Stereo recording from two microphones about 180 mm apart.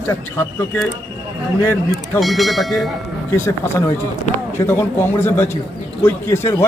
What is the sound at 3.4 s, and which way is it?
A man's voice, 15° left (ahead or behind).